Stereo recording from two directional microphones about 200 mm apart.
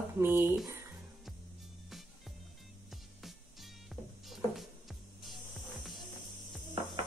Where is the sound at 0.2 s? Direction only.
10° right (ahead or behind).